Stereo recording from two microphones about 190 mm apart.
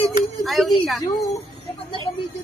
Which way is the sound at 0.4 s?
Centre (ahead or behind).